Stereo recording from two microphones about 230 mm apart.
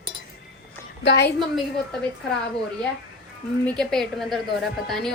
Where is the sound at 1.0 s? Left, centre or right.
Left.